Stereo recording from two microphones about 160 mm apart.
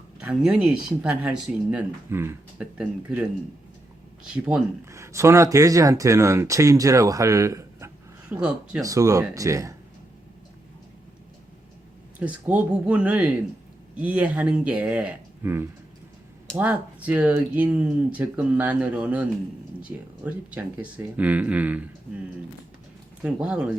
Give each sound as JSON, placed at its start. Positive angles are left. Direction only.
{"t": 0.2, "sound": "speech", "side_deg": -5}
{"t": 4.9, "sound": "speech", "side_deg": -20}
{"t": 8.3, "sound": "speech", "side_deg": -5}
{"t": 8.8, "sound": "speech", "side_deg": -20}
{"t": 12.2, "sound": "speech", "side_deg": -10}
{"t": 23.2, "sound": "speech", "side_deg": -5}